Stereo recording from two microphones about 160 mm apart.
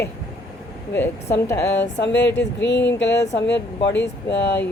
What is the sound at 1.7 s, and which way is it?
Speech, 90° left.